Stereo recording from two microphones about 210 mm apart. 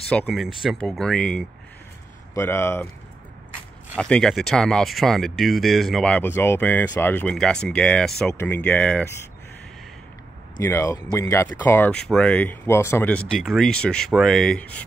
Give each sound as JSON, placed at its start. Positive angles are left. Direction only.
{"t": 0.1, "sound": "speech", "side_deg": 5}
{"t": 3.9, "sound": "speech", "side_deg": 5}
{"t": 10.6, "sound": "speech", "side_deg": 15}